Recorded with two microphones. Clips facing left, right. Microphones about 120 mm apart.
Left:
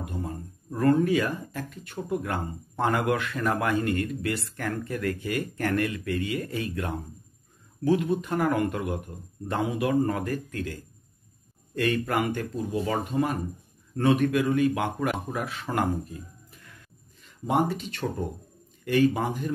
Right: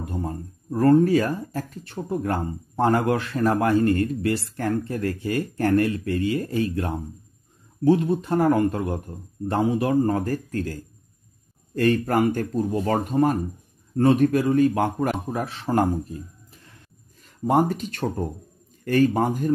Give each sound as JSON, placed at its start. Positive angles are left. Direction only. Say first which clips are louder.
{"t": 0.0, "sound": "speech", "louder": "right 4 dB", "side_deg": -35}
{"t": 16.6, "sound": "a sound", "louder": "even", "side_deg": -35}
{"t": 18.9, "sound": "speech", "louder": "right 3 dB", "side_deg": -45}